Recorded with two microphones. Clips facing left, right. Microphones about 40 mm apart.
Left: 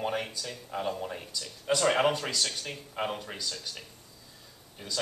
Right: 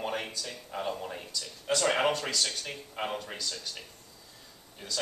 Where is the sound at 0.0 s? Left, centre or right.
Centre.